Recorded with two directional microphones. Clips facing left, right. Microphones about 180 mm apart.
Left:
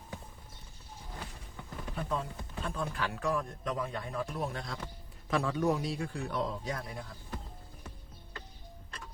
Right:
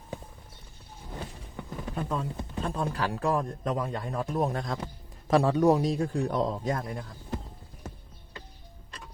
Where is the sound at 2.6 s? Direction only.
40° right (ahead or behind).